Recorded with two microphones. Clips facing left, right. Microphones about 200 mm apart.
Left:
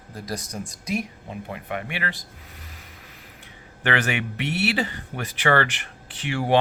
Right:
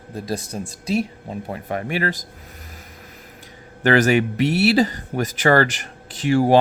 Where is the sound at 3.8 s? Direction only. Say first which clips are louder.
Right 9 dB; 40° right (ahead or behind).